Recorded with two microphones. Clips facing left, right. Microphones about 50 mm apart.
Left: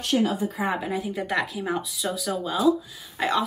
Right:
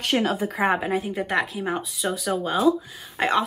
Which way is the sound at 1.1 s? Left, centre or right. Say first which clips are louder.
Right 2 dB; centre.